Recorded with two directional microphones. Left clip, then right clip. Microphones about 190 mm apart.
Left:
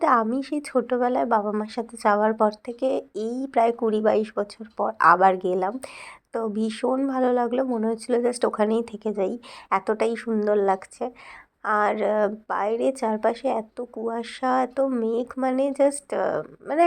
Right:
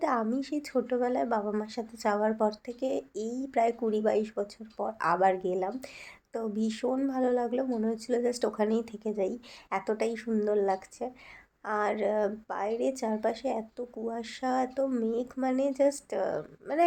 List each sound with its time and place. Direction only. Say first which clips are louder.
0.0 s a woman's voice: left 9 dB; 25° left (ahead or behind)